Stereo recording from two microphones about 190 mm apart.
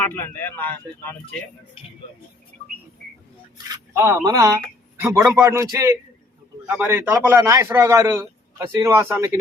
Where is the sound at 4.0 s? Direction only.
15° right (ahead or behind).